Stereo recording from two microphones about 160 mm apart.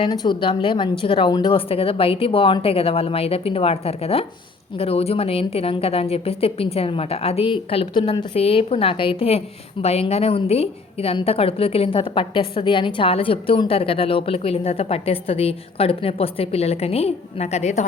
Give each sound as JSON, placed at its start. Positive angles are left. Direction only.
{"t": 0.0, "sound": "a woman's voice", "side_deg": 25}
{"t": 8.3, "sound": "a woman's voice", "side_deg": 40}